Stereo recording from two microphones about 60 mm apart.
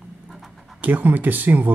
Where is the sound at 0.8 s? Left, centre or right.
Right.